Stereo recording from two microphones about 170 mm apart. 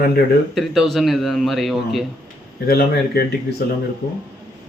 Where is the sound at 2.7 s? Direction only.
65° left (ahead or behind).